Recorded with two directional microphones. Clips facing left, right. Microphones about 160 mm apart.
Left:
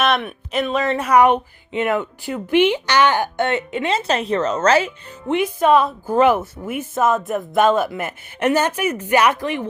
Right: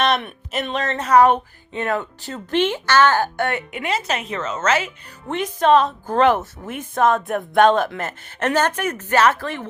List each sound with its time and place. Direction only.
0.0 s speech: centre (ahead or behind)
0.9 s a woman's voice: 10° left (ahead or behind); by 4.9 s 35° left (ahead or behind)
5.3 s a woman's voice: 10° left (ahead or behind)